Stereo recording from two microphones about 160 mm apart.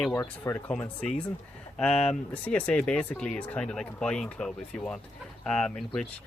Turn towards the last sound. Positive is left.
turn(degrees=5)  # may be behind; listen again after turning